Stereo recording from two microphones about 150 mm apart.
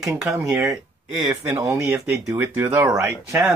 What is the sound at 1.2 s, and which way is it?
Speech, 20° right (ahead or behind).